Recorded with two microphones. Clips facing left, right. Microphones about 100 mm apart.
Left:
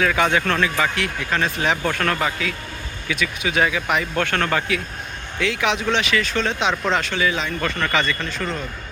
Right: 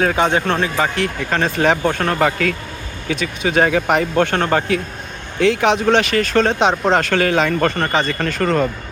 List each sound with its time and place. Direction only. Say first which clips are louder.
0.2 s speech: right 3 dB; 30° right (ahead or behind)
1.8 s speech: right 4 dB; 30° right (ahead or behind)
2.1 s speech: right 7 dB; 50° right (ahead or behind)
3.1 s speech: right 4 dB; 40° right (ahead or behind)
4.2 s speech: right 5 dB; 25° right (ahead or behind); by 7.7 s 55° right (ahead or behind)
7.7 s speech: right 3 dB; 35° right (ahead or behind)
8.3 s speech: right 10 dB; 55° right (ahead or behind)